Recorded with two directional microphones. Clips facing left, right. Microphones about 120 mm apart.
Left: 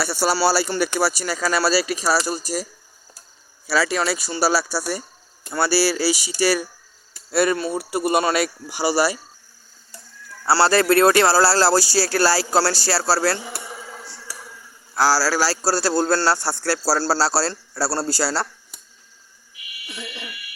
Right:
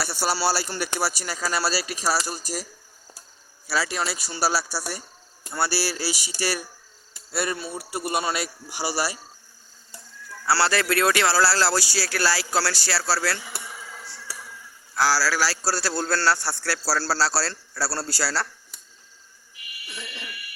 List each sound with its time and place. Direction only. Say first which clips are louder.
0.0 s speech: left 5 dB; 90° left
3.7 s speech: left 6 dB; 90° left
7.3 s speech: left 9 dB; 70° left (ahead or behind)
10.4 s speech: left 6 dB; 30° left (ahead or behind)
13.6 s a sound: left 4 dB; 30° left (ahead or behind)
14.9 s a man's voice: left 4 dB; 35° left (ahead or behind)
19.9 s a sound: left 4 dB; 10° left (ahead or behind)